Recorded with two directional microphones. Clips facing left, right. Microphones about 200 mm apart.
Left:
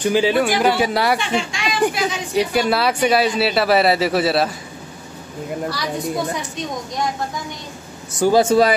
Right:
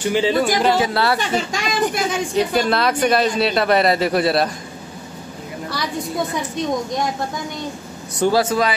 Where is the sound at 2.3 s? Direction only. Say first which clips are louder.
Left 1 dB; 10° left (ahead or behind).